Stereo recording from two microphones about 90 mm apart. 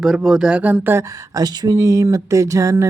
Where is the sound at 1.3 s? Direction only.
45° right (ahead or behind).